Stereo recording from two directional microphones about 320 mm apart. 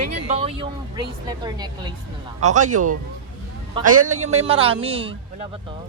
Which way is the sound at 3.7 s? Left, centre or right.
Right.